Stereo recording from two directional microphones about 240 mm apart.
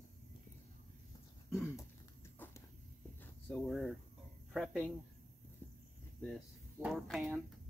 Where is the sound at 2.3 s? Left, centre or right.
Centre.